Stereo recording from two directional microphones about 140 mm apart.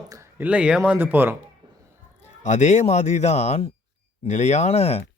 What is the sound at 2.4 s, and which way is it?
Speech, 55° left (ahead or behind).